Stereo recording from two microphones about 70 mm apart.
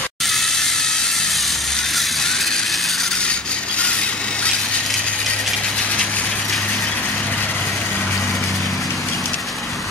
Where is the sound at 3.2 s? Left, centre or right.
Centre.